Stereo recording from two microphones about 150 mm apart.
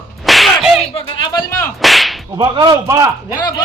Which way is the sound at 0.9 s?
30° left (ahead or behind).